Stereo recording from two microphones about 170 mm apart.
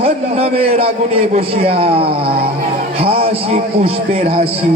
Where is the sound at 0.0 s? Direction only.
35° right (ahead or behind).